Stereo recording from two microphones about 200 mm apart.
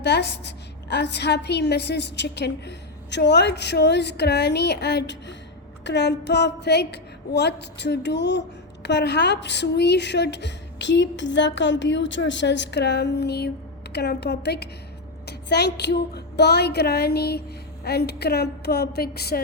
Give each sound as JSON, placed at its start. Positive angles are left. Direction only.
{"t": 0.0, "sound": "a woman's voice", "side_deg": 60}